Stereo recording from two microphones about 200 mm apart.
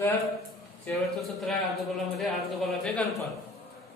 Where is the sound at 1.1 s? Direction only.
Centre (ahead or behind).